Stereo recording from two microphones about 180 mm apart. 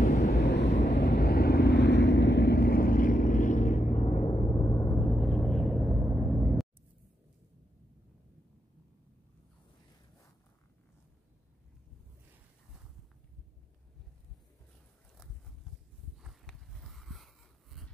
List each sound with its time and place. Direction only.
0.0 s vehicle: 45° left (ahead or behind)
0.4 s vehicle: 70° left (ahead or behind); by 4.9 s 20° left (ahead or behind)
4.9 s vehicle: 5° left (ahead or behind)
16.2 s a sound: centre (ahead or behind)